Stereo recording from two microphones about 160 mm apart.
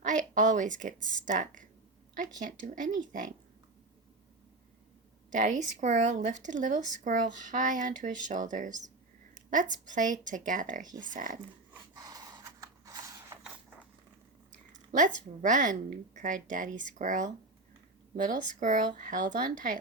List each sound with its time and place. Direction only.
0.0 s a woman's voice: 50° right (ahead or behind)
2.6 s speech: 50° right (ahead or behind)
5.3 s speech: 50° right (ahead or behind)
11.7 s snort: 20° right (ahead or behind)
14.5 s a sound: 50° right (ahead or behind)
15.4 s speech: 50° right (ahead or behind)